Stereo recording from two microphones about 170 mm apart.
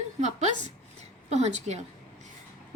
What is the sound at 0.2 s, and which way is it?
A woman's voice, 45° right (ahead or behind).